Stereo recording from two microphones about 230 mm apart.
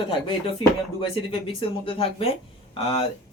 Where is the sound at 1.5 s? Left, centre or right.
Left.